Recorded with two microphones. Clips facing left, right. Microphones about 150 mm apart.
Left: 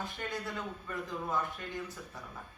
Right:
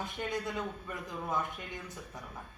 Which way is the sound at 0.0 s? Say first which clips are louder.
Right 3 dB; 20° right (ahead or behind).